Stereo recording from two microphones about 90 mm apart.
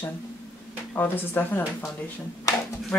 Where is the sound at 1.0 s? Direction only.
20° left (ahead or behind).